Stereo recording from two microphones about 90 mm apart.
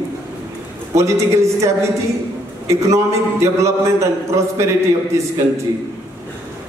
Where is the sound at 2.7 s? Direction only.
35° right (ahead or behind).